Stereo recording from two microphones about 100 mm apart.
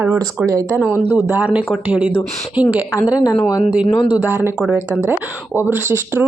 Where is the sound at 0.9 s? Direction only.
20° right (ahead or behind).